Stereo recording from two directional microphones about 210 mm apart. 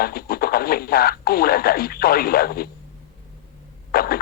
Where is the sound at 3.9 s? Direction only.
45° left (ahead or behind).